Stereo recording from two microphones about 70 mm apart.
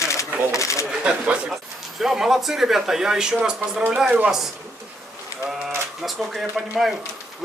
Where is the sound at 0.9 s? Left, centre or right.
Centre.